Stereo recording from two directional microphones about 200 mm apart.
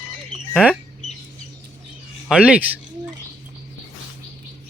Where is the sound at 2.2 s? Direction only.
5° right (ahead or behind).